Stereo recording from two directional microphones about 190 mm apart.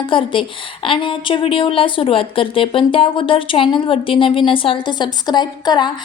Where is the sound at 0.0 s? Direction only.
25° left (ahead or behind).